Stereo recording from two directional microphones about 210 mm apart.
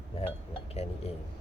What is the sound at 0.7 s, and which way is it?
Speech, 30° left (ahead or behind).